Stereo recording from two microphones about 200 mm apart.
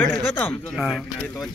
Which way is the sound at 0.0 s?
10° left (ahead or behind).